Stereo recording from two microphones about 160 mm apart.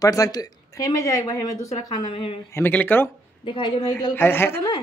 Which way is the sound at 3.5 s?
30° left (ahead or behind).